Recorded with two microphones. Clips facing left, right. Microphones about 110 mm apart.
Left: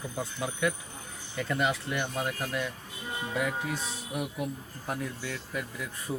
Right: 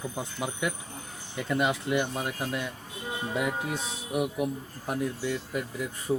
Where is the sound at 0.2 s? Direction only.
20° right (ahead or behind).